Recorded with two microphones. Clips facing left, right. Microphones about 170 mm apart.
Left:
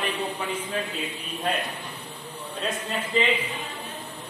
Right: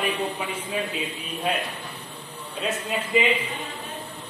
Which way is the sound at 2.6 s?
10° right (ahead or behind).